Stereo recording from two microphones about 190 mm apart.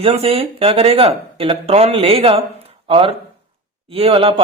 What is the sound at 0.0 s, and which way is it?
Speech, 30° right (ahead or behind).